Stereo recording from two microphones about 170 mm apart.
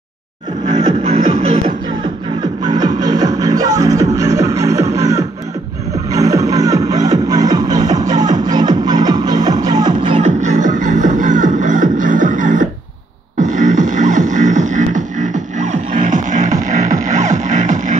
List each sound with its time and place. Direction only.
2.8 s music: 20° right (ahead or behind)
10.2 s music: 50° right (ahead or behind)